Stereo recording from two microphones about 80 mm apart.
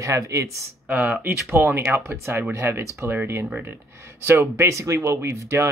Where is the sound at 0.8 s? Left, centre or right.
Centre.